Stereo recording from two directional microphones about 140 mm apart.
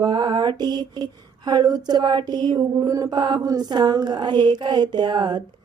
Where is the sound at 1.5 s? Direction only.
30° right (ahead or behind).